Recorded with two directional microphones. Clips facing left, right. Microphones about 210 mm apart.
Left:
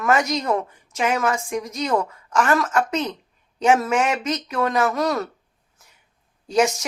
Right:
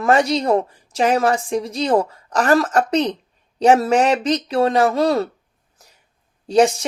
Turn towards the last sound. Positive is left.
turn(degrees=-35)  # may be behind; listen again after turning